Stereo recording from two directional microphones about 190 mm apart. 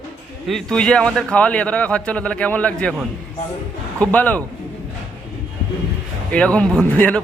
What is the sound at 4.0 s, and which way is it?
Speech, 10° left (ahead or behind).